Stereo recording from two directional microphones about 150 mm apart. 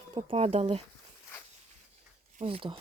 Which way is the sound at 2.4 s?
40° right (ahead or behind).